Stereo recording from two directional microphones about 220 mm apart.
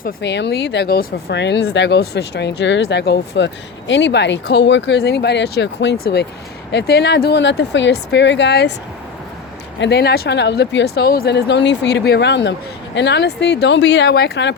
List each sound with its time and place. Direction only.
0.0 s speech: 50° left (ahead or behind)
9.8 s speech: 45° left (ahead or behind)